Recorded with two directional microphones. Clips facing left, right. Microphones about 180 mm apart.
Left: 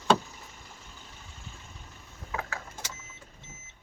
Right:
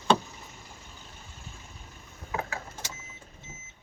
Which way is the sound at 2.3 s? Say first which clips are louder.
Right 2 dB; 20° right (ahead or behind).